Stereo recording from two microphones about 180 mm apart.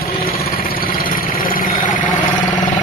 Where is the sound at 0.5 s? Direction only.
55° left (ahead or behind).